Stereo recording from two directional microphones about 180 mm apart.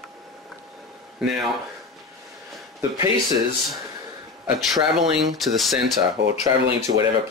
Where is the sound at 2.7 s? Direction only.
20° right (ahead or behind).